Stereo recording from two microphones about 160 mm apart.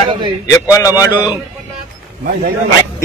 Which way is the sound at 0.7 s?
20° left (ahead or behind).